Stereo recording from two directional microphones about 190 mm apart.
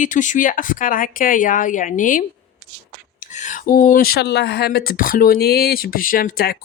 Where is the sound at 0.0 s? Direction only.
40° left (ahead or behind).